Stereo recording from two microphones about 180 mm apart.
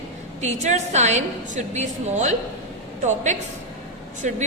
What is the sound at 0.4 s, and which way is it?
A man's voice, 40° right (ahead or behind).